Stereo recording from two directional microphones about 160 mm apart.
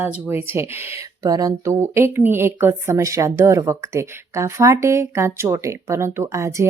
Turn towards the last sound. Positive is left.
turn(degrees=-20)  # may be behind; listen again after turning